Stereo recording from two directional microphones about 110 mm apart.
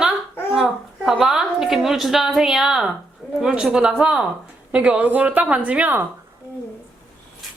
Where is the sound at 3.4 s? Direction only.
5° right (ahead or behind).